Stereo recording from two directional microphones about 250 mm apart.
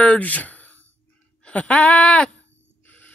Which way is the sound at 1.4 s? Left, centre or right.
Centre.